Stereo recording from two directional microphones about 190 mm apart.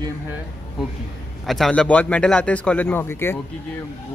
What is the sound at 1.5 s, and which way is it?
Speech, centre (ahead or behind).